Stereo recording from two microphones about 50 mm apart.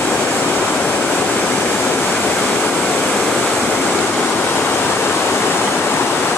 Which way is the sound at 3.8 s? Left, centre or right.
Left.